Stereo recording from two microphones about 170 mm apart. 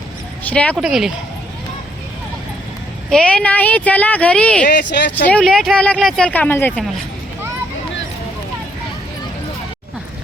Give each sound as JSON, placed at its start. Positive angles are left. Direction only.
{"t": 0.4, "sound": "speech", "side_deg": 10}
{"t": 3.1, "sound": "speech", "side_deg": 5}
{"t": 4.7, "sound": "speech", "side_deg": 90}
{"t": 5.1, "sound": "speech", "side_deg": 5}